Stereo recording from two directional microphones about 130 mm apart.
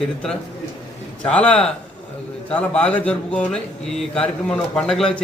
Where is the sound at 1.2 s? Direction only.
10° left (ahead or behind).